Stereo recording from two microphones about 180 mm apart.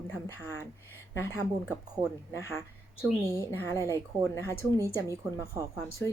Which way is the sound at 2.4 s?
15° left (ahead or behind).